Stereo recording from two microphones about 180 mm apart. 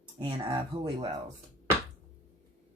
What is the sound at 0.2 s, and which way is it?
Speech, 30° right (ahead or behind).